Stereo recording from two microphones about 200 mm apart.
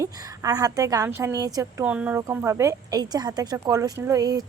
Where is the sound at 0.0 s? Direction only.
15° right (ahead or behind).